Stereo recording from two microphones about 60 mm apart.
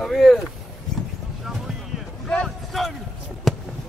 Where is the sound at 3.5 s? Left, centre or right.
Centre.